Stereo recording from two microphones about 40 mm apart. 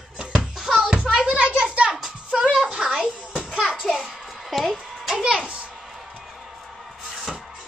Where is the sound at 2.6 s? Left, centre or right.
Right.